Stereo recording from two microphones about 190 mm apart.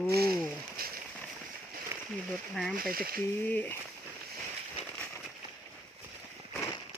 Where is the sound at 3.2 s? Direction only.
10° left (ahead or behind).